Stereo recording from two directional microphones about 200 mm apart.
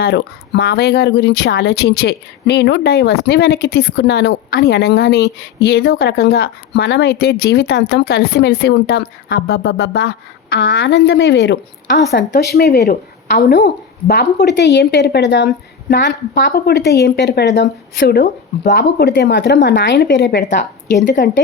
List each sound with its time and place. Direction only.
0.0 s a woman's voice: 55° left (ahead or behind)